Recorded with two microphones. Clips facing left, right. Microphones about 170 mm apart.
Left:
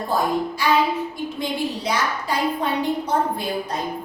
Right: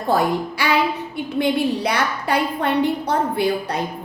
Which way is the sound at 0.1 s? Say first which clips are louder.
Right 4 dB; 70° right (ahead or behind).